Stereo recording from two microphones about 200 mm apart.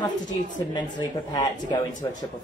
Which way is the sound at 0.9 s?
20° left (ahead or behind).